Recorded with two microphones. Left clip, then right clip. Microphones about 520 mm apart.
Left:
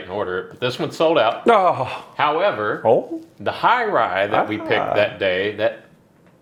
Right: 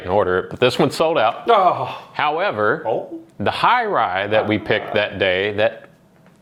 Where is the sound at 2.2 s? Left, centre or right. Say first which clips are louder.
Even; right.